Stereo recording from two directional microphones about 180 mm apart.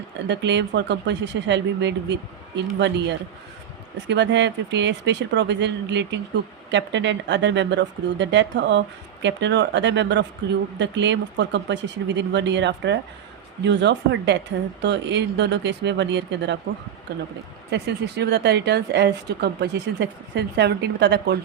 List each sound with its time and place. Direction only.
0.3 s speech: 75° right (ahead or behind)